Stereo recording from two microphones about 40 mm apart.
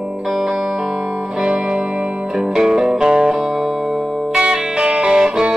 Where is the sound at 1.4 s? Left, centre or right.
Right.